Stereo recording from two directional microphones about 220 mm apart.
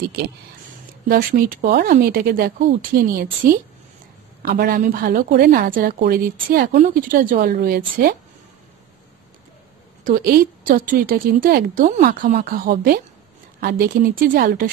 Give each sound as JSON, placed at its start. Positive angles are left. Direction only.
{"t": 1.0, "sound": "speech", "side_deg": -40}
{"t": 10.0, "sound": "a woman's voice", "side_deg": -40}